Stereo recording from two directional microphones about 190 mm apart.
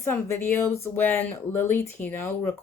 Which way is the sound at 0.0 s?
10° left (ahead or behind).